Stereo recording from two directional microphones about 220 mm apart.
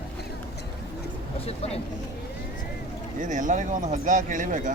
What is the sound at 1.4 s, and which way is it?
Speech, 30° left (ahead or behind).